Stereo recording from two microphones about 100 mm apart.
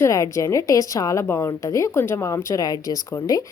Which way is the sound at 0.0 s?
30° left (ahead or behind).